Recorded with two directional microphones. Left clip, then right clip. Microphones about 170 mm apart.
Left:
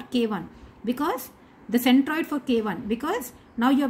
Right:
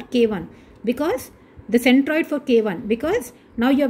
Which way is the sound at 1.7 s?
40° left (ahead or behind).